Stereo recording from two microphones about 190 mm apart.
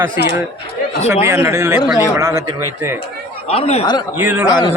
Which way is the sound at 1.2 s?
15° right (ahead or behind).